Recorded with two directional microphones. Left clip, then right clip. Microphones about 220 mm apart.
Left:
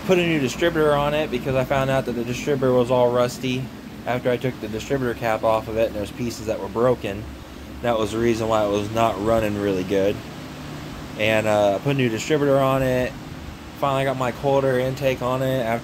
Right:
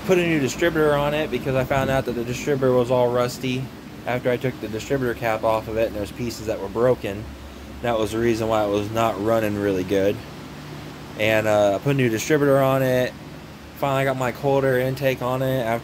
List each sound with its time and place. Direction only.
0.1 s speech: 5° right (ahead or behind)
11.1 s speech: 10° right (ahead or behind)